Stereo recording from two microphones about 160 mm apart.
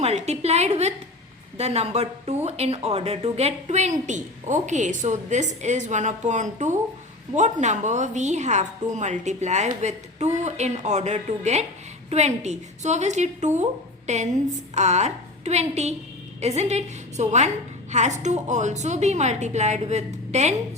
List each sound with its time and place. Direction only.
0.0 s speech: 40° right (ahead or behind)